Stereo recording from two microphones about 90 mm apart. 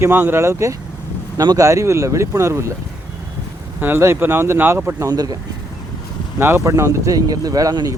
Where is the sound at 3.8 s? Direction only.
25° right (ahead or behind).